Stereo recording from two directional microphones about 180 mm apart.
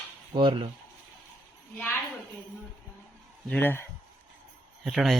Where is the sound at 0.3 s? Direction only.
25° right (ahead or behind).